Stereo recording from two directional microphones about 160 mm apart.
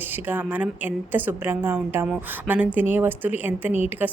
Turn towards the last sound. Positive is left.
turn(degrees=-10)  # may be behind; listen again after turning